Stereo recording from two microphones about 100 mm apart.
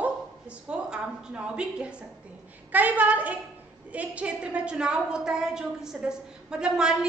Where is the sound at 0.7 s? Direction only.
10° right (ahead or behind).